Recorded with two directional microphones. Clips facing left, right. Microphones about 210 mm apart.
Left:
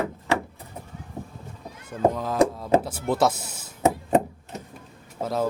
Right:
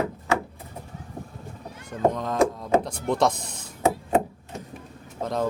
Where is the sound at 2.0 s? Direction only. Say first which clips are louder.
Left 1 dB; 5° left (ahead or behind).